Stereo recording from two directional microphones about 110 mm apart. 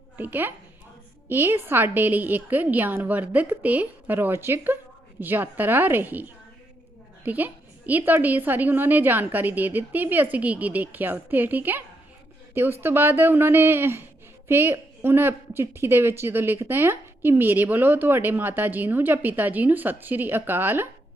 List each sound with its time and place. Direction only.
0.2 s a woman's voice: 15° right (ahead or behind)